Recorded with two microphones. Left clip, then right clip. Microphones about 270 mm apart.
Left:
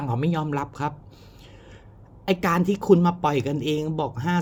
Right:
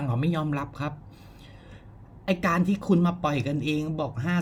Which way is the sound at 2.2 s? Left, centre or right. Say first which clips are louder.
Left 3 dB; centre.